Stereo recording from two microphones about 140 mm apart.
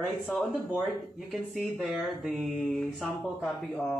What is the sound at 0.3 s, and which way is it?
Mantra, centre (ahead or behind).